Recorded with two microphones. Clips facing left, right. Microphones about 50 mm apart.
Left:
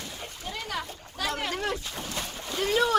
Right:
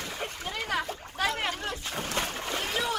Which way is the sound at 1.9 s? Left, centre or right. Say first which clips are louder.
Right 4 dB; right.